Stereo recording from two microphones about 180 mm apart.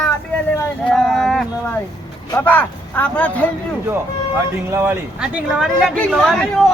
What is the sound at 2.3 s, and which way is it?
Speech, 10° left (ahead or behind).